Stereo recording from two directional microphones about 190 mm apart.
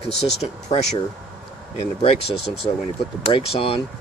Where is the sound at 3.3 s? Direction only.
30° left (ahead or behind).